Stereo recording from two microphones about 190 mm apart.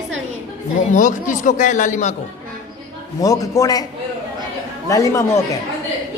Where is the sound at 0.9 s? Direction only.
40° left (ahead or behind).